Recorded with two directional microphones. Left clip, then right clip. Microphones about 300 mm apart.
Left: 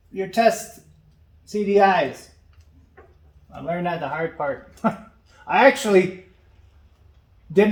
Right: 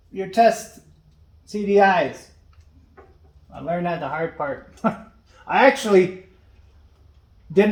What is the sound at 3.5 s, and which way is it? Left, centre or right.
Speech, centre.